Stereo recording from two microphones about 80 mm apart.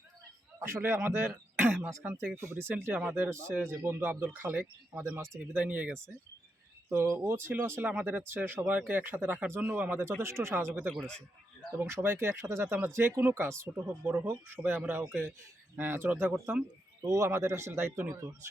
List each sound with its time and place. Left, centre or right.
0.6 s speech: right
3.5 s speech: right
5.5 s speech: centre
6.9 s speech: right; by 10.0 s centre
10.2 s speech: right
11.8 s speech: right